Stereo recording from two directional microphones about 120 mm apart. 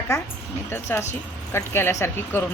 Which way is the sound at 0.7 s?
20° left (ahead or behind).